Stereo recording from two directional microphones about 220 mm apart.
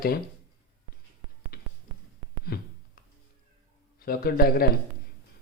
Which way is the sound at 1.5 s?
45° left (ahead or behind).